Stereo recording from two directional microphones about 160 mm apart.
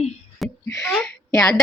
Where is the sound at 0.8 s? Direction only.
5° left (ahead or behind).